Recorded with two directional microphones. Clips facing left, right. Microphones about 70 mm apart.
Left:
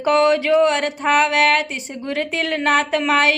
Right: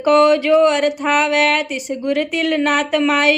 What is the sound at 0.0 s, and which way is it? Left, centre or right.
Speech, left.